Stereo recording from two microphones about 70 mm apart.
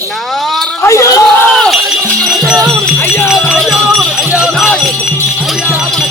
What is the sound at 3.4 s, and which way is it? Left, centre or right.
Speech, centre.